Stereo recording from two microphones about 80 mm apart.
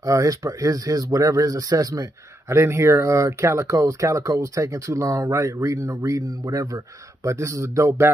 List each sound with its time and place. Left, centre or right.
0.0 s speech: right
2.4 s speech: right